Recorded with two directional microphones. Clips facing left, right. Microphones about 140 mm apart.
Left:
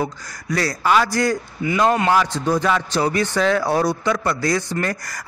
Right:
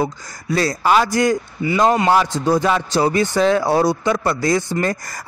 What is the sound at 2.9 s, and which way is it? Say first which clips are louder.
Speech: right 3 dB; 30° right (ahead or behind).